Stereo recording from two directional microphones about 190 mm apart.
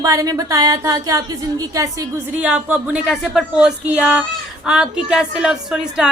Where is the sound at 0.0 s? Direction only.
15° right (ahead or behind).